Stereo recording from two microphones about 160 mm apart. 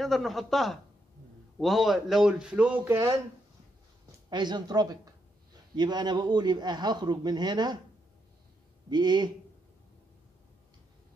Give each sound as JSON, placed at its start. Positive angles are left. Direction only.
{"t": 0.0, "sound": "speech", "side_deg": 0}
{"t": 4.3, "sound": "speech", "side_deg": -30}
{"t": 8.9, "sound": "speech", "side_deg": -25}